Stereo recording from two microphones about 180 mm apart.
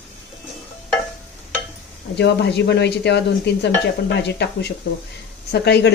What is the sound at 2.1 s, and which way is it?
Speech, 70° left (ahead or behind).